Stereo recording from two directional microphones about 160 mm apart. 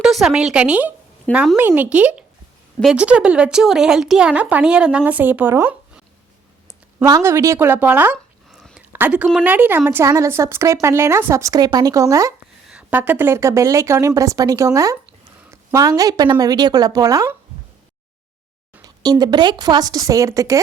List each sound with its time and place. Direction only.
0.0 s a woman's voice: centre (ahead or behind)
7.0 s a woman's voice: 20° right (ahead or behind)
8.5 s a sound: 5° right (ahead or behind)
8.9 s a woman's voice: 10° right (ahead or behind)
12.6 s speech: 10° right (ahead or behind)
18.8 s speech: 25° right (ahead or behind)